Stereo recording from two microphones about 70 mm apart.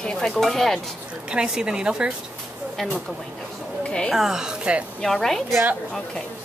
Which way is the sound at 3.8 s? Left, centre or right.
Centre.